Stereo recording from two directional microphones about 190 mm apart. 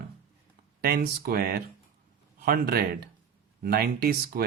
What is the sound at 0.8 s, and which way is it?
Speech, 55° right (ahead or behind).